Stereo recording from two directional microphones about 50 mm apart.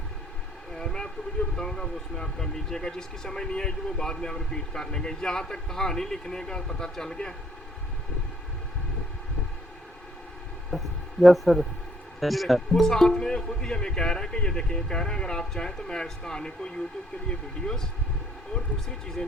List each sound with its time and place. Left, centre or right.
0.8 s vehicle: centre
1.5 s speech: centre
10.7 s a sound: centre
12.2 s speech: centre